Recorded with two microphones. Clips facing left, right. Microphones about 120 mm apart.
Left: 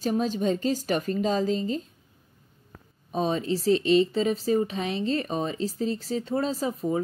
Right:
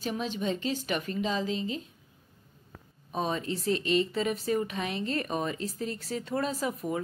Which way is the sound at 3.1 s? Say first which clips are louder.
Left 5 dB; 35° left (ahead or behind).